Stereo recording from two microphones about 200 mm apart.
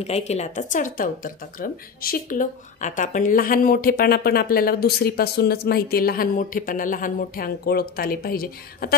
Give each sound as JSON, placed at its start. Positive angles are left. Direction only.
{"t": 0.0, "sound": "speech", "side_deg": 30}